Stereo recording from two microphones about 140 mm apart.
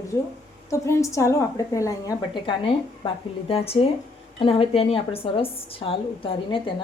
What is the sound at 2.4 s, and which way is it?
A woman's voice, 40° left (ahead or behind).